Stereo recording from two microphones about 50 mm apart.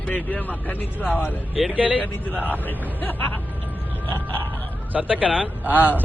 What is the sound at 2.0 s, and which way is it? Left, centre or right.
Speech, left.